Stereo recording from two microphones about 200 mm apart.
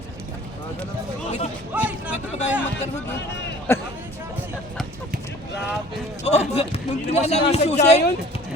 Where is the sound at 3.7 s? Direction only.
10° left (ahead or behind).